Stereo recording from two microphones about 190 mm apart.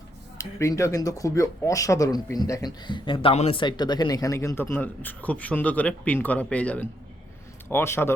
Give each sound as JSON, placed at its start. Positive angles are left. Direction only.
{"t": 0.3, "sound": "speech", "side_deg": 15}